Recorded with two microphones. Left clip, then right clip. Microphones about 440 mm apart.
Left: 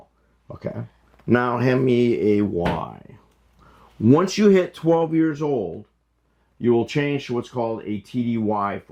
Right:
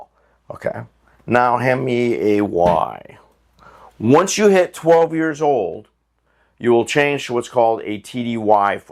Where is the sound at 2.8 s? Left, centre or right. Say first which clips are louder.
Right 11 dB; right.